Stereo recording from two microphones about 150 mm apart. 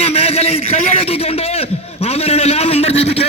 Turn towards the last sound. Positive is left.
turn(degrees=45)  # may be behind; listen again after turning